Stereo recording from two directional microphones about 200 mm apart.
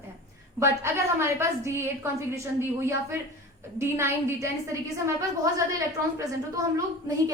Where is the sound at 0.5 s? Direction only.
15° right (ahead or behind).